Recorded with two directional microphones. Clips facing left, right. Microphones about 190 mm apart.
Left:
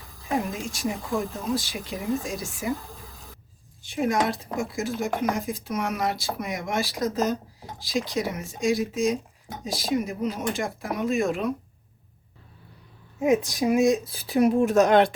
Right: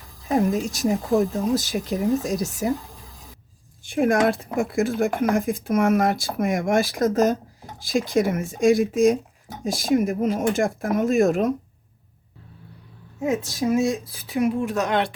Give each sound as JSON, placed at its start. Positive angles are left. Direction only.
{"t": 0.5, "sound": "speech", "side_deg": -40}
{"t": 3.8, "sound": "speech", "side_deg": -55}
{"t": 13.1, "sound": "speech", "side_deg": 15}
{"t": 14.1, "sound": "speech", "side_deg": 35}